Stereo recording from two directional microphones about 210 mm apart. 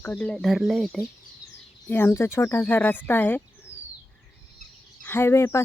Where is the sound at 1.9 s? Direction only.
10° left (ahead or behind).